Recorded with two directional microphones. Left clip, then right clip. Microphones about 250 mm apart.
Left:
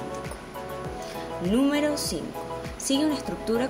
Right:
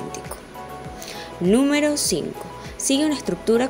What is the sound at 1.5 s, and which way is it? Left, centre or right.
Speech, right.